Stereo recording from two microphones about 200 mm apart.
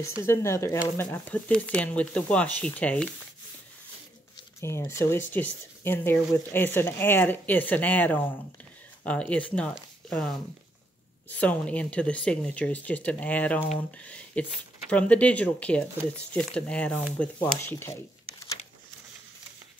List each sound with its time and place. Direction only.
0.2 s speech: 15° left (ahead or behind)
4.6 s speech: 15° left (ahead or behind)